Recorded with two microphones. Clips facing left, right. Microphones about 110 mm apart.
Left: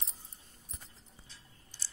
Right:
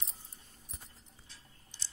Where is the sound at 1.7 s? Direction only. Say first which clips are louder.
Even; 20° right (ahead or behind).